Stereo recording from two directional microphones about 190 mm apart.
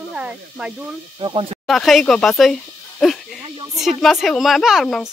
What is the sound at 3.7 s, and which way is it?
Speech, centre (ahead or behind).